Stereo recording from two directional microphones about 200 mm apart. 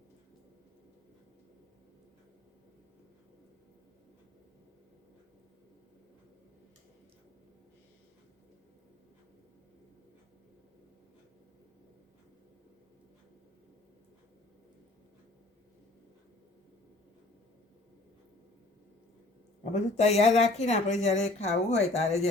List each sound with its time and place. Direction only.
19.7 s speech: 30° left (ahead or behind)